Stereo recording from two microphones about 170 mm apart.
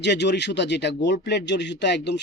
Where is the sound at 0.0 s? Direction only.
90° left.